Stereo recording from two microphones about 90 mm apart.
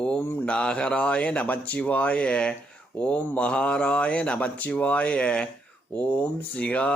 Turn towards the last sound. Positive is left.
turn(degrees=15)  # may be behind; listen again after turning